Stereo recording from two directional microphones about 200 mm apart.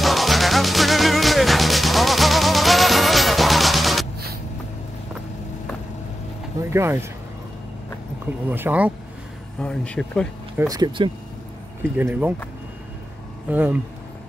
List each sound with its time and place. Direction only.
0.0 s music: centre (ahead or behind)
6.6 s speech: 15° right (ahead or behind)
8.5 s speech: 10° right (ahead or behind)
9.6 s speech: 5° left (ahead or behind)
10.6 s speech: 20° right (ahead or behind)
11.8 s speech: 10° right (ahead or behind)
13.5 s speech: 10° right (ahead or behind)